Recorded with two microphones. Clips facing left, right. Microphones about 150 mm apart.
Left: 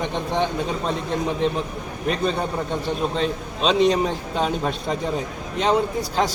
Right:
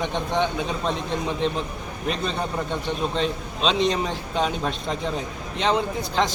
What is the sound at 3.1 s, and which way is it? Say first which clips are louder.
A man's voice: left 1 dB; 5° left (ahead or behind).